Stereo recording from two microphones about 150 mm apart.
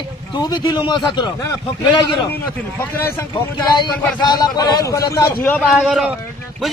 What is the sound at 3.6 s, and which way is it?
Speech, 30° left (ahead or behind).